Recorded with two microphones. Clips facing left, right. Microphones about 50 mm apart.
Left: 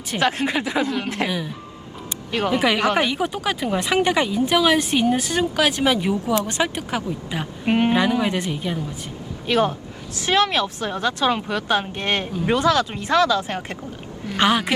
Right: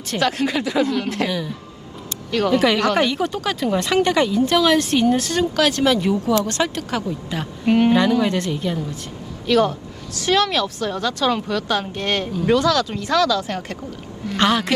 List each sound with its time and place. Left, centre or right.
0.2 s speech: left
0.9 s speech: centre
2.0 s speech: left
9.5 s speech: left
14.3 s speech: centre